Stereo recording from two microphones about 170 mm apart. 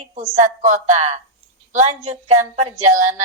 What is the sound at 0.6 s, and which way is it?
Speech, 40° right (ahead or behind).